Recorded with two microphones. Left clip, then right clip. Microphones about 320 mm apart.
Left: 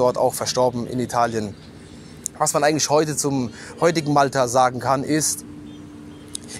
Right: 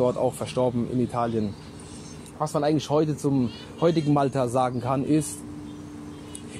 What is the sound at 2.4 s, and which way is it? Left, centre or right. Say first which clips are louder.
A man's voice: left 6 dB; left.